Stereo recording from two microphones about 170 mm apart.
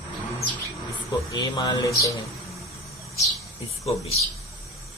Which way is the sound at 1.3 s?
25° left (ahead or behind).